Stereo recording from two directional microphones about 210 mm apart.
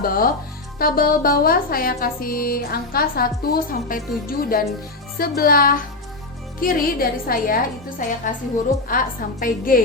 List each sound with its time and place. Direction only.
0.0 s speech: 45° left (ahead or behind)